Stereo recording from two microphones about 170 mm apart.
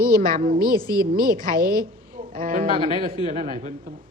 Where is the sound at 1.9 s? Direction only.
55° right (ahead or behind).